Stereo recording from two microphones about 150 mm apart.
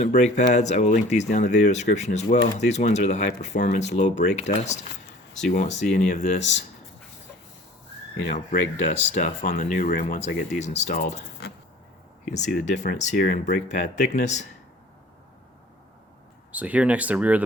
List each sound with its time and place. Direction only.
0.0 s speech: 50° left (ahead or behind)
8.3 s speech: 50° left (ahead or behind)
10.2 s speech: 50° left (ahead or behind)
12.2 s speech: 50° left (ahead or behind)
16.5 s speech: 10° right (ahead or behind)